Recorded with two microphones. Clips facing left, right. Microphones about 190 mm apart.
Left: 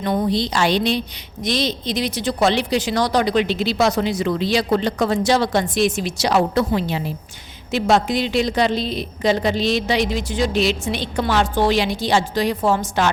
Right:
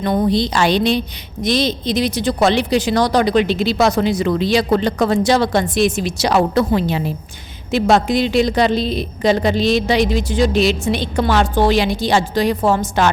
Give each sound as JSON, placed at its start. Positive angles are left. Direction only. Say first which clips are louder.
{"t": 0.0, "sound": "a woman's voice", "louder": "right 3 dB", "side_deg": -50}
{"t": 1.5, "sound": "a woman's voice", "louder": "right 4 dB", "side_deg": -40}